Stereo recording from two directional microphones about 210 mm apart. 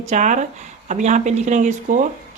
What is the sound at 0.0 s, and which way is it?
Speech, 35° right (ahead or behind).